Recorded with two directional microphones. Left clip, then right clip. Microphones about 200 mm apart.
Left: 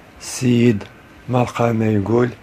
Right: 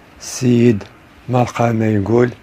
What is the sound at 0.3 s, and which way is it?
Speech, 10° right (ahead or behind).